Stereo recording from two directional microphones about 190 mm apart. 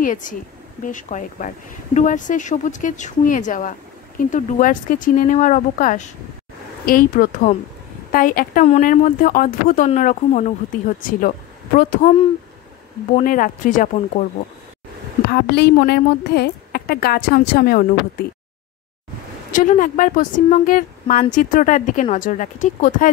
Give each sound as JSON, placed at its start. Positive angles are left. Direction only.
{"t": 0.0, "sound": "a woman's voice", "side_deg": 45}
{"t": 13.1, "sound": "a woman's voice", "side_deg": 45}
{"t": 15.3, "sound": "a woman's voice", "side_deg": 60}
{"t": 19.5, "sound": "a woman's voice", "side_deg": 45}